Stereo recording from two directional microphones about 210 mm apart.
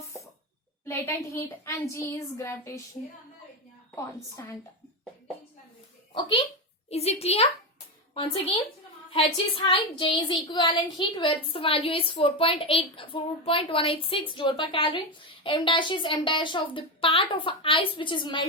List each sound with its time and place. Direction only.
0.9 s a woman's voice: 10° left (ahead or behind)
3.9 s a woman's voice: 15° left (ahead or behind)
6.1 s a woman's voice: 25° left (ahead or behind)